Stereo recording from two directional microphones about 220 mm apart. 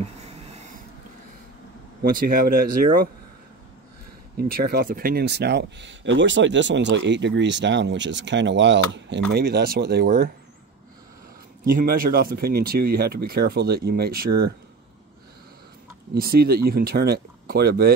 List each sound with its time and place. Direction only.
2.0 s speech: 40° right (ahead or behind)
4.4 s speech: 40° right (ahead or behind)
11.6 s speech: 40° right (ahead or behind)
16.2 s speech: 45° right (ahead or behind)